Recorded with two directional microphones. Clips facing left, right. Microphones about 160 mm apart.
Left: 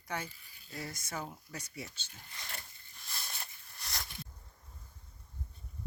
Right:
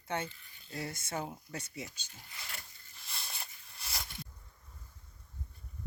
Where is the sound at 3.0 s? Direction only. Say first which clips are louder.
Even; centre (ahead or behind).